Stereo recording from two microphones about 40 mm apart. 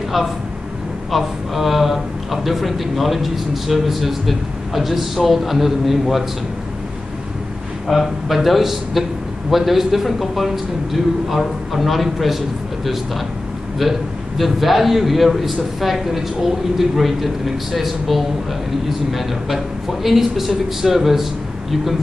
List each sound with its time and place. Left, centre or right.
1.1 s speech: centre
7.9 s speech: centre